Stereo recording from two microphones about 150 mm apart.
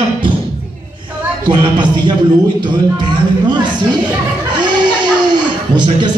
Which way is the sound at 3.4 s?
30° right (ahead or behind).